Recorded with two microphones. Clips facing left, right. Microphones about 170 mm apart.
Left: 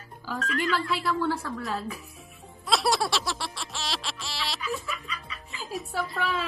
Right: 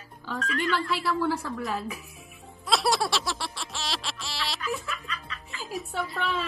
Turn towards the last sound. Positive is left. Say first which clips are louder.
# left 1 dB
turn(degrees=0)  # may be behind; listen again after turning